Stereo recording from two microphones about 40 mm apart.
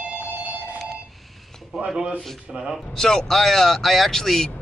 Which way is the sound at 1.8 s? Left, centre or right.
Centre.